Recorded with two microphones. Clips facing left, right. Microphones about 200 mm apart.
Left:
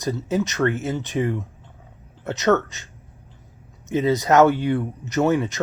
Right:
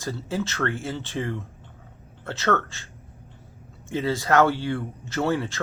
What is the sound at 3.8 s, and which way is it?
Speech, 20° left (ahead or behind).